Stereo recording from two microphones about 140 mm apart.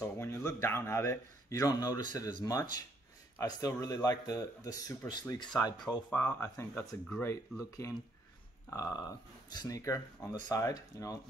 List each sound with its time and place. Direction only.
0.0 s speech: 20° left (ahead or behind)
6.1 s speech: 15° left (ahead or behind)